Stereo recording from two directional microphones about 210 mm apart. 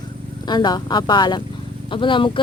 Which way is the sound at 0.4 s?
20° left (ahead or behind).